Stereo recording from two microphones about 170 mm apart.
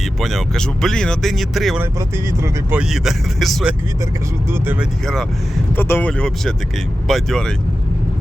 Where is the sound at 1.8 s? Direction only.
15° right (ahead or behind).